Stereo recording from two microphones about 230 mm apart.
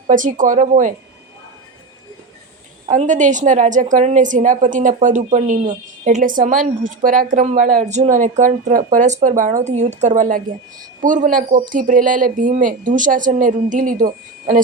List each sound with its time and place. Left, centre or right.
0.1 s a woman's voice: right
2.8 s a woman's voice: right